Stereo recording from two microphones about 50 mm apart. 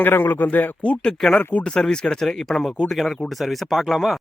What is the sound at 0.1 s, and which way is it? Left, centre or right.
Speech, left.